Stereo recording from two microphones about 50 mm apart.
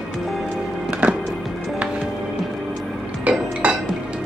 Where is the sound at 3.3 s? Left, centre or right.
Right.